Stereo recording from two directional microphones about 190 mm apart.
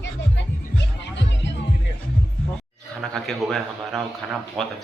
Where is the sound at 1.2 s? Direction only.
70° left (ahead or behind).